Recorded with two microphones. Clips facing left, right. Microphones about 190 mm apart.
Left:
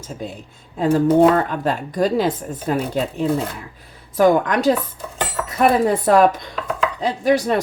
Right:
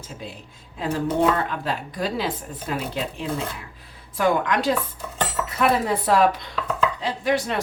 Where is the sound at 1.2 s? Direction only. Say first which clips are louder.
Left 7 dB; 50° left (ahead or behind).